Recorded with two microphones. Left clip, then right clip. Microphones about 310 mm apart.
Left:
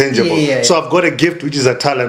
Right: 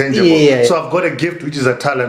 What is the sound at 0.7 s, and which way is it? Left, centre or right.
Speech, left.